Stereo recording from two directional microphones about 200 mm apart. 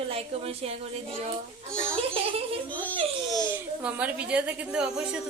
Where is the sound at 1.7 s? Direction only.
5° left (ahead or behind).